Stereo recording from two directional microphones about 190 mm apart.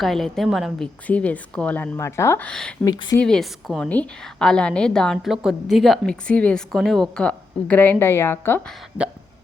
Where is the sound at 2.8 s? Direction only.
20° left (ahead or behind).